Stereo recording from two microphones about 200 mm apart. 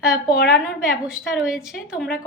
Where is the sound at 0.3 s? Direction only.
50° left (ahead or behind).